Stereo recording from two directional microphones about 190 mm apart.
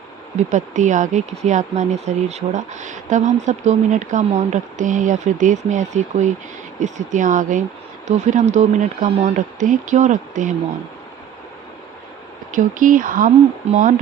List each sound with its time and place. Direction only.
0.3 s speech: 40° right (ahead or behind)
12.5 s speech: 45° right (ahead or behind)